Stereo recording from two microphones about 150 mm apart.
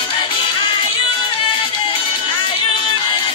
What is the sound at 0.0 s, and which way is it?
Music, 35° left (ahead or behind).